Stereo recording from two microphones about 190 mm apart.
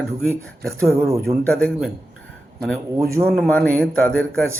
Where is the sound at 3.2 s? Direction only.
5° left (ahead or behind).